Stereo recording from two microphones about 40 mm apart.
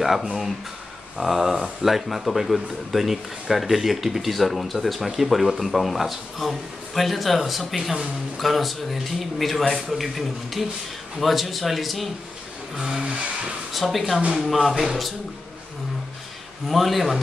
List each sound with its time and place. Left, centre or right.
1.1 s speech: centre
12.7 s a sound: centre
13.7 s speech: centre
16.6 s speech: centre